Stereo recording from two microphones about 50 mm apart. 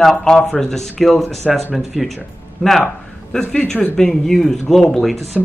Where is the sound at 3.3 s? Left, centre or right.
Centre.